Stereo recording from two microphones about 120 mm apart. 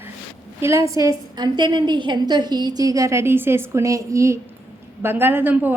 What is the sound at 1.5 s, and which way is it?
A woman's voice, 40° right (ahead or behind).